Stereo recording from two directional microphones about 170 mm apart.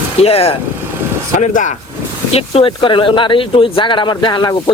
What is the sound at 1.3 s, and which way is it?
Speech, 50° left (ahead or behind).